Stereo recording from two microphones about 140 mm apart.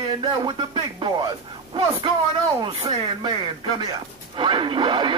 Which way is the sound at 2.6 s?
35° right (ahead or behind).